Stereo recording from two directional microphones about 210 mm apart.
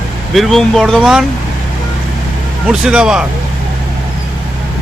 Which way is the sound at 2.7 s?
5° right (ahead or behind).